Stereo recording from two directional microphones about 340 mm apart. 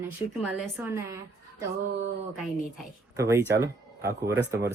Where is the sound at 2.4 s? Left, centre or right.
Centre.